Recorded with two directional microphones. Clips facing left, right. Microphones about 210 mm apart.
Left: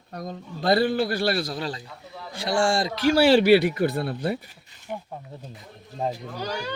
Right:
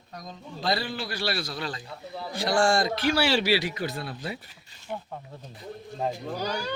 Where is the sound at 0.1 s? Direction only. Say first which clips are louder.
Left 6 dB; 55° left (ahead or behind).